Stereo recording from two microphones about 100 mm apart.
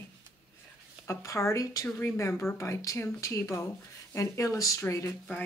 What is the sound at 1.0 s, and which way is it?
Speech, 30° left (ahead or behind).